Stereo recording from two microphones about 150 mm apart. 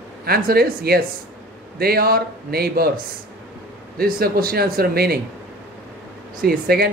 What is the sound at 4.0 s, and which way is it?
A man's voice, 80° right.